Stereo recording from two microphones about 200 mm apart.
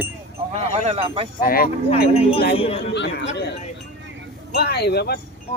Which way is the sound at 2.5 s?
30° left (ahead or behind).